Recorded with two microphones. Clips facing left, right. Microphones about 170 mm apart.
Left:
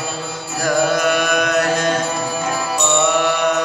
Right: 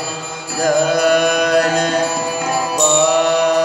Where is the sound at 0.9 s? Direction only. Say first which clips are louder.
Right 4 dB; 30° right (ahead or behind).